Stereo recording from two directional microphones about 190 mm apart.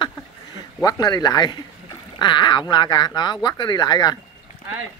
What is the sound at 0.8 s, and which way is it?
Speech, 20° left (ahead or behind).